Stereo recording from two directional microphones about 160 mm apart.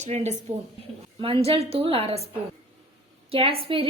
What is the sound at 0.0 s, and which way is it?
A woman's voice, 45° right (ahead or behind).